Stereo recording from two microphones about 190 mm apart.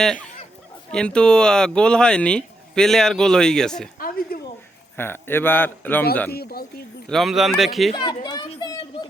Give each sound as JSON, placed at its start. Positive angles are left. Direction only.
{"t": 0.0, "sound": "speech", "side_deg": 5}
{"t": 4.3, "sound": "a sound", "side_deg": 50}
{"t": 4.9, "sound": "speech", "side_deg": 10}
{"t": 6.3, "sound": "speech", "side_deg": 55}
{"t": 7.1, "sound": "speech", "side_deg": 0}
{"t": 7.9, "sound": "speech", "side_deg": 25}